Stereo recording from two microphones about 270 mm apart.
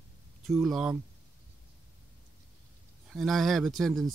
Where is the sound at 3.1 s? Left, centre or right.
Centre.